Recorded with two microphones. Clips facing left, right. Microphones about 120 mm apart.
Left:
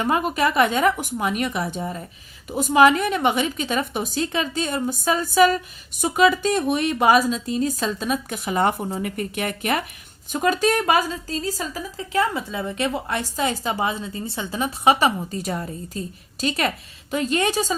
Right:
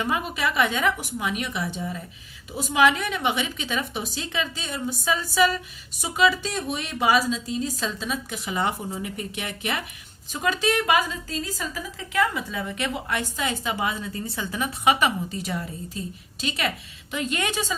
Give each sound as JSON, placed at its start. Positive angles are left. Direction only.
{"t": 0.0, "sound": "a woman's voice", "side_deg": 45}